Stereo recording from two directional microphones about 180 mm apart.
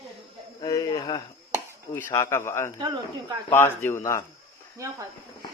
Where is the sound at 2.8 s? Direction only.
25° right (ahead or behind).